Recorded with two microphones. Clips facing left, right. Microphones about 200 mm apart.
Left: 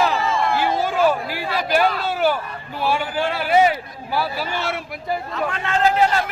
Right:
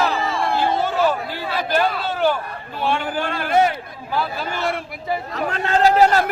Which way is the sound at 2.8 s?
10° left (ahead or behind).